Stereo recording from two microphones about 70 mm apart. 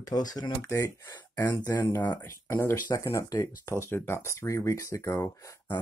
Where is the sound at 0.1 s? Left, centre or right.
Left.